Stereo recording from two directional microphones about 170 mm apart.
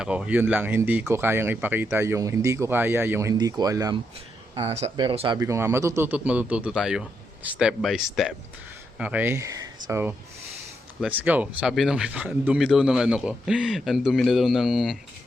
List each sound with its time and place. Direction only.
0.0 s speech: 5° right (ahead or behind); by 4.0 s 20° right (ahead or behind)
4.5 s speech: 35° right (ahead or behind)
5.4 s a man's voice: 15° right (ahead or behind)